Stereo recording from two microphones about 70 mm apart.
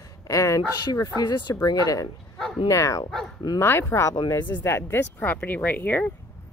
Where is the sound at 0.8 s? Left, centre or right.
Left.